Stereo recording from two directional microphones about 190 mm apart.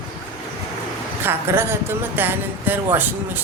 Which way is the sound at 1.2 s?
10° right (ahead or behind).